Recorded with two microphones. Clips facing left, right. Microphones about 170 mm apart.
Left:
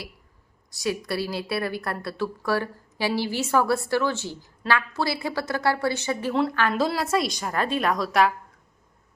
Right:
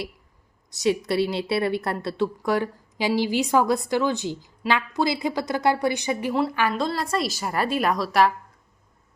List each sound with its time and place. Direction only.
0.7 s a woman's voice: 20° right (ahead or behind)
6.3 s a woman's voice: 5° right (ahead or behind)
6.7 s a woman's voice: 5° left (ahead or behind)